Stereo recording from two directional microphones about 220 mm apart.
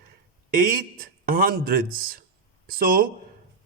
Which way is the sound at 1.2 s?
40° right (ahead or behind).